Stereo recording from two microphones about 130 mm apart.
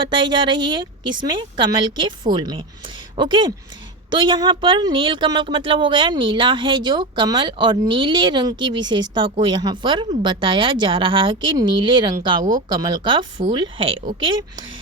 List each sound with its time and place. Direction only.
0.1 s a woman's voice: 35° right (ahead or behind)